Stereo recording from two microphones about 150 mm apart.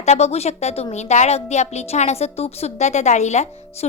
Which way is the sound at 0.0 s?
45° left (ahead or behind).